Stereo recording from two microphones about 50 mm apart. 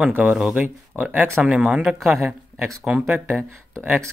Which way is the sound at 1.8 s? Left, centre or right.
Centre.